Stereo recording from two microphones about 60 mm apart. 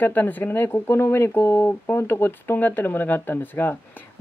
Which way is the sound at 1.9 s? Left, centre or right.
Left.